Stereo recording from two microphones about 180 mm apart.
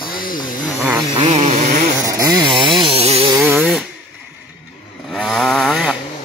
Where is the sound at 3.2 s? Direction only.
15° right (ahead or behind).